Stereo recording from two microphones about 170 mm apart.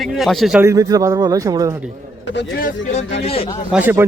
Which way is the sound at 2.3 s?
60° left (ahead or behind).